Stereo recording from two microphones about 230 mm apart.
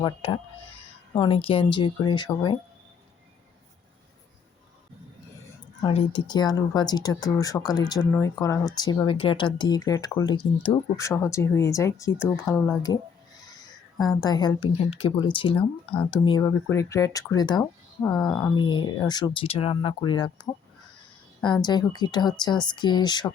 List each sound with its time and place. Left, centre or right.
0.0 s speech: left
5.8 s speech: left